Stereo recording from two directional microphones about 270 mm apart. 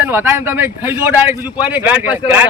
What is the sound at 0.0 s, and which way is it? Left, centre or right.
Speech, centre.